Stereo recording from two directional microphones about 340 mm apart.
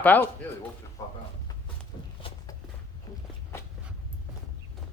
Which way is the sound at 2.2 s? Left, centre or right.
Centre.